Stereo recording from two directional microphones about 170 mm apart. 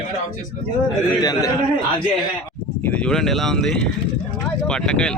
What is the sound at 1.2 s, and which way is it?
Speech, 25° left (ahead or behind).